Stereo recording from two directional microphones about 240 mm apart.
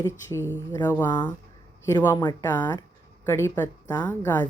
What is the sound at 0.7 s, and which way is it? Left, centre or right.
Speech, centre.